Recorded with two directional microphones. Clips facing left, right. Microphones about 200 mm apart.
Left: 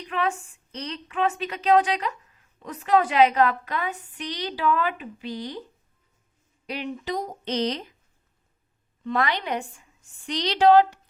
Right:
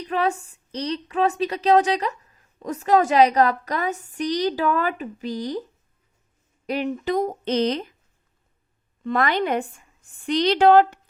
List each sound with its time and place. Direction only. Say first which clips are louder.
0.0 s a woman's voice: right 4 dB; 40° right (ahead or behind)
6.7 s speech: right 6 dB; 45° right (ahead or behind)
9.0 s speech: right 4 dB; 50° right (ahead or behind)